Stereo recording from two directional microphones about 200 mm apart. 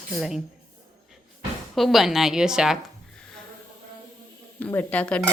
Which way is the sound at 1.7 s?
Centre (ahead or behind).